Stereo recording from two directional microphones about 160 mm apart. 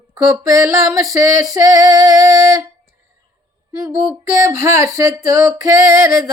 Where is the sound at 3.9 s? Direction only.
20° right (ahead or behind).